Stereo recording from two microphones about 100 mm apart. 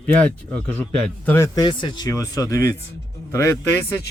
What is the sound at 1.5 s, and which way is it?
Speech, 50° left (ahead or behind).